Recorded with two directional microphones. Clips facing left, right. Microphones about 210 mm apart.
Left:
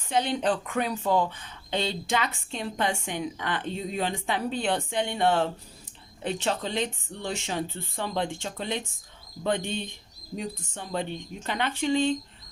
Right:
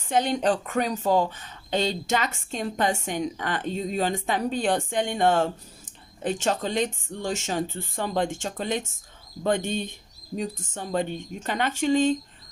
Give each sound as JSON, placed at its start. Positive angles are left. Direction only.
{"t": 0.1, "sound": "a woman's voice", "side_deg": -45}
{"t": 11.4, "sound": "a woman's voice", "side_deg": -45}